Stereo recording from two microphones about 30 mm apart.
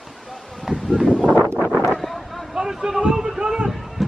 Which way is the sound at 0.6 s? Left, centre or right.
Centre.